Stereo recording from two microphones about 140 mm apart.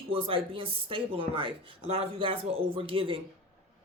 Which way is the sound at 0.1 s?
40° right (ahead or behind).